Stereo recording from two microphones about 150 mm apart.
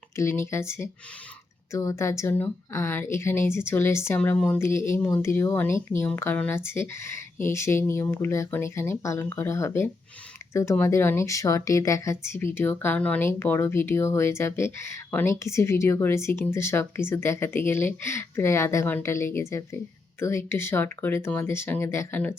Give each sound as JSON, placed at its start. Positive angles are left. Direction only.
{"t": 0.2, "sound": "speech", "side_deg": 15}